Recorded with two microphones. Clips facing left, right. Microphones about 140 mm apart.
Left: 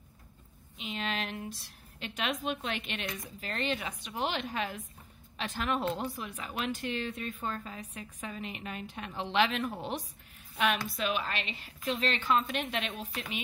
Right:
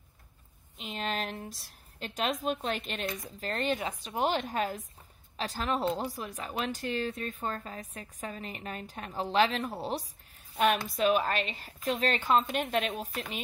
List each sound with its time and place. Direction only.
0.8 s a woman's voice: 40° right (ahead or behind)